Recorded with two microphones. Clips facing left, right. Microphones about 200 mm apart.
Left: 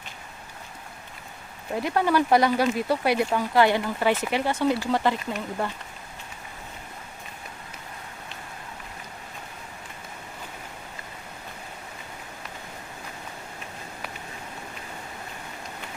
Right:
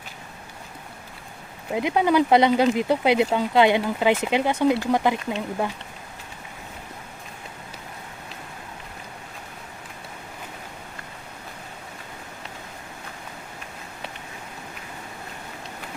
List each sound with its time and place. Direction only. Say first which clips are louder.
1.7 s speech: right 3 dB; 15° right (ahead or behind)